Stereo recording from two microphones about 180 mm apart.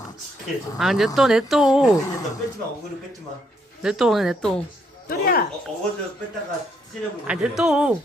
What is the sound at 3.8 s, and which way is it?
Speech, centre (ahead or behind).